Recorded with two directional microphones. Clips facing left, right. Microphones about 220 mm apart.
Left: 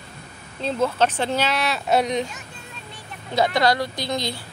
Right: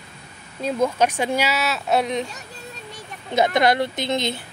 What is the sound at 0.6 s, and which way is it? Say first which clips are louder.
Speech: right 1 dB; 10° right (ahead or behind).